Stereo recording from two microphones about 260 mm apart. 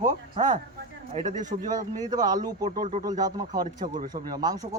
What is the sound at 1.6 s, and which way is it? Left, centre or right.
Speech, centre.